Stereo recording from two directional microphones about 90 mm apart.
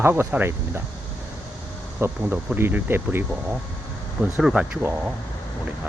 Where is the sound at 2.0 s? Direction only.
30° right (ahead or behind).